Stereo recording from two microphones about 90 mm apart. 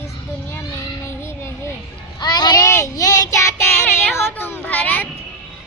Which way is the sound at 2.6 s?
35° left (ahead or behind).